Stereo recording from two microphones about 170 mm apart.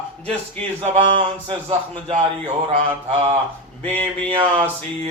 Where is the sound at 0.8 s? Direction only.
30° right (ahead or behind).